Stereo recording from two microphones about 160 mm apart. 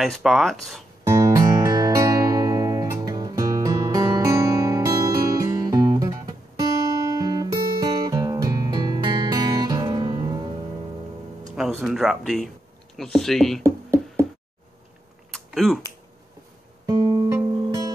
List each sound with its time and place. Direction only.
0.0 s speech: centre (ahead or behind)
1.0 s music: 20° right (ahead or behind)
7.2 s music: 25° right (ahead or behind)
11.5 s a sound: 5° right (ahead or behind)
12.9 s speech: centre (ahead or behind)
13.7 s music: 20° right (ahead or behind)
15.3 s typing: centre (ahead or behind)
16.8 s music: 25° right (ahead or behind)